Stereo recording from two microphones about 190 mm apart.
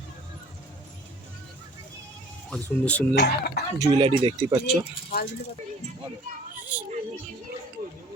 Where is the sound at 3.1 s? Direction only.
60° left (ahead or behind).